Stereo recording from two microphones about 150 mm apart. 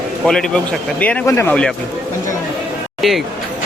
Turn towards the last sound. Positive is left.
turn(degrees=0)  # may be behind; listen again after turning